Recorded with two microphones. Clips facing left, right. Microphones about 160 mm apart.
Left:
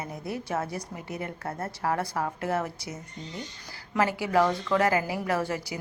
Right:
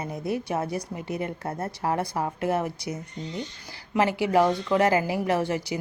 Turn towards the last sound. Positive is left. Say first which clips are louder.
# right 3 dB
turn(degrees=-20)  # may be behind; listen again after turning